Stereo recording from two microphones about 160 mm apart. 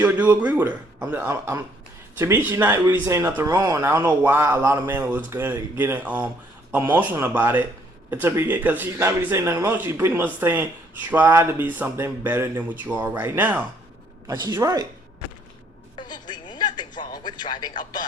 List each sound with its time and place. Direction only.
0.0 s speech: 10° right (ahead or behind)
14.3 s speech: 25° right (ahead or behind)
16.0 s a sound: 25° left (ahead or behind)